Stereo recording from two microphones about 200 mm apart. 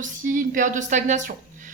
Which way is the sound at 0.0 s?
40° right (ahead or behind).